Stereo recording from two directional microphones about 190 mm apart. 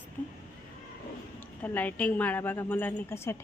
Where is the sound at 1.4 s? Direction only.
10° left (ahead or behind).